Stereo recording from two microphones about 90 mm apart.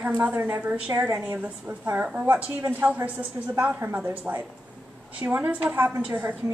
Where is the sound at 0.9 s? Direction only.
30° right (ahead or behind).